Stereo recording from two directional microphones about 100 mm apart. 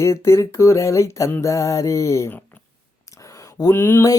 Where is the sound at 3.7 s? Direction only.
25° left (ahead or behind).